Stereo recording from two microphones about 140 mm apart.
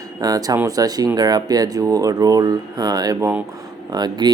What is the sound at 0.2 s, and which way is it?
Speech, 25° right (ahead or behind).